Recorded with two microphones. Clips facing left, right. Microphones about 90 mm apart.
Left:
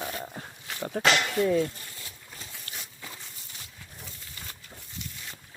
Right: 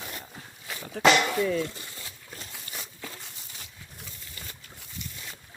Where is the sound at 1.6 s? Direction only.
90° right.